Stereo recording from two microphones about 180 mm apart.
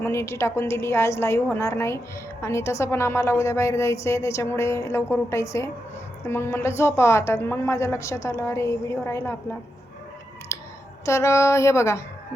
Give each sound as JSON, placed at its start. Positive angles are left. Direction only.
{"t": 0.0, "sound": "a woman's voice", "side_deg": 15}
{"t": 10.5, "sound": "clicking", "side_deg": 15}
{"t": 11.0, "sound": "a woman's voice", "side_deg": 15}